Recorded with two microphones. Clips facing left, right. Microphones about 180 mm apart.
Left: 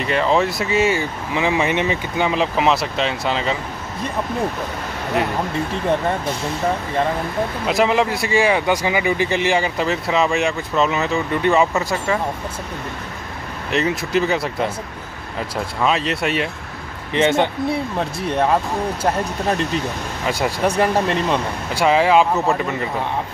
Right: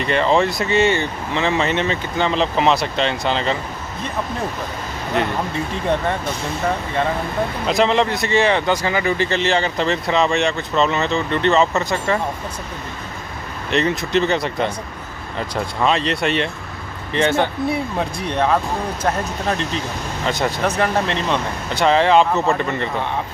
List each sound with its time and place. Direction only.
0.0 s speech: centre (ahead or behind)
5.2 s speech: 5° left (ahead or behind)
7.6 s speech: 5° left (ahead or behind)
13.7 s speech: 5° left (ahead or behind)
17.1 s speech: 20° left (ahead or behind)
17.9 s speech: 5° left (ahead or behind)